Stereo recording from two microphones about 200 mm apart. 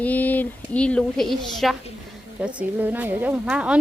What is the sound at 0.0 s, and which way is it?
A woman's voice, 10° left (ahead or behind).